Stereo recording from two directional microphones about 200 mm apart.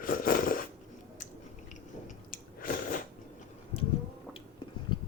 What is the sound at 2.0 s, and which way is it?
Chewing, 40° left (ahead or behind).